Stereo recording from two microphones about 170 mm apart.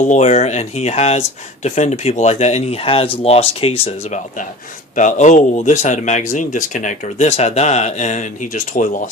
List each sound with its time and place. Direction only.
0.1 s speech: 45° left (ahead or behind)